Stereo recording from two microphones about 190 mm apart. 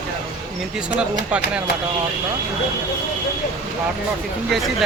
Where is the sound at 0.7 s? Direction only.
5° right (ahead or behind).